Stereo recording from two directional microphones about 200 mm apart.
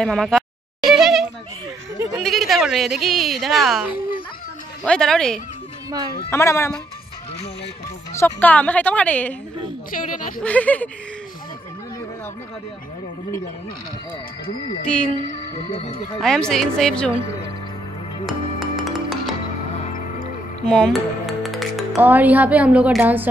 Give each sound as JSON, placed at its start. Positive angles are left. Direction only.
{"t": 0.0, "sound": "a woman's voice", "side_deg": 0}
{"t": 0.8, "sound": "a sound", "side_deg": 0}
{"t": 2.1, "sound": "a woman's voice", "side_deg": 0}
{"t": 8.1, "sound": "a woman's voice", "side_deg": 10}
{"t": 9.8, "sound": "speech", "side_deg": 45}
{"t": 10.4, "sound": "a woman's voice", "side_deg": 5}
{"t": 15.3, "sound": "speech", "side_deg": 30}
{"t": 16.2, "sound": "a woman's voice", "side_deg": 5}
{"t": 18.2, "sound": "music", "side_deg": 0}
{"t": 20.6, "sound": "music", "side_deg": 5}
{"t": 21.9, "sound": "a woman's voice", "side_deg": -10}